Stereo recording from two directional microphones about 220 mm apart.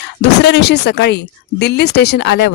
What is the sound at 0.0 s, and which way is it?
Speech, 50° left (ahead or behind).